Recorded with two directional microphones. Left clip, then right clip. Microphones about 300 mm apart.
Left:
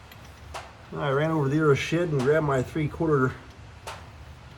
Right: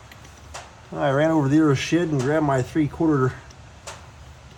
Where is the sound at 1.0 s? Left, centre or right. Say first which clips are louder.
Right 6 dB; right.